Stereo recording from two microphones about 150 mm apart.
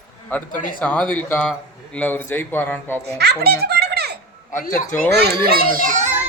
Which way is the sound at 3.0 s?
90° right.